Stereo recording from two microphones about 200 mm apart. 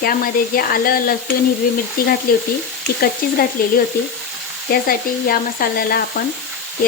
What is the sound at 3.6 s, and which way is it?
Frying, 45° left (ahead or behind).